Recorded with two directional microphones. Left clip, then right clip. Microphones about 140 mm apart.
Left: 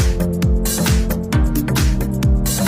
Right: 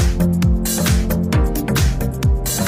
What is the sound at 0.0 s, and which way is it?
Music, centre (ahead or behind).